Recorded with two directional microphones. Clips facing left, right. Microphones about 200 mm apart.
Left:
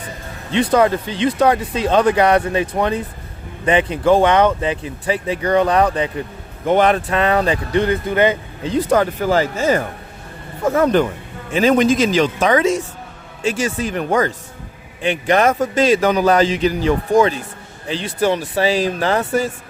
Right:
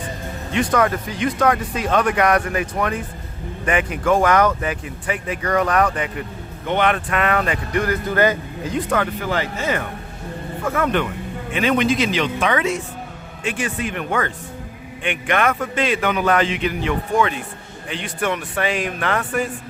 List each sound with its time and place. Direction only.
0.5 s speech: 30° left (ahead or behind)